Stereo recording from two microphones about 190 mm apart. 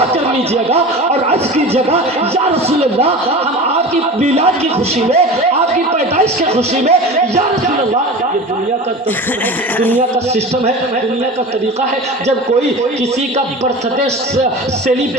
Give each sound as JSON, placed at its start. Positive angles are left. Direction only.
{"t": 1.3, "sound": "speech", "side_deg": -35}
{"t": 6.1, "sound": "speech", "side_deg": -35}